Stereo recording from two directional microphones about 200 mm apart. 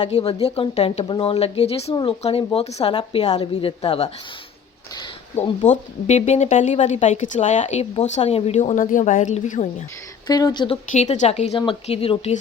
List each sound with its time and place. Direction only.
0.0 s a woman's voice: 30° left (ahead or behind)
5.4 s a woman's voice: 35° left (ahead or behind)
10.2 s a woman's voice: 20° left (ahead or behind)
10.9 s a woman's voice: 35° left (ahead or behind)